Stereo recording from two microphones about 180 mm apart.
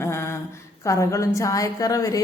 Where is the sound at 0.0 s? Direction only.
15° left (ahead or behind).